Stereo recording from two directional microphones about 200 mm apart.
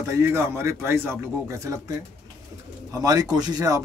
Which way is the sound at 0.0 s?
15° right (ahead or behind).